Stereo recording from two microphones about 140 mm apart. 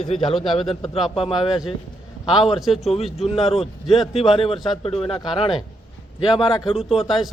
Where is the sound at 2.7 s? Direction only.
45° left (ahead or behind).